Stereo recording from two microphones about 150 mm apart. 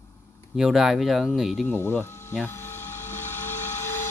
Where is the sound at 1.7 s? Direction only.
15° left (ahead or behind).